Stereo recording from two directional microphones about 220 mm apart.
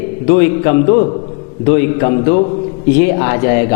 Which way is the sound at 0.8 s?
35° left (ahead or behind).